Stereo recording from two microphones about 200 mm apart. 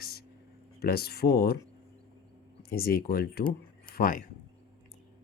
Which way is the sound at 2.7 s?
50° left (ahead or behind).